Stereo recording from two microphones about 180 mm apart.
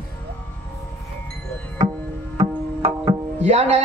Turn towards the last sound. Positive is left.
turn(degrees=-40)  # may be behind; listen again after turning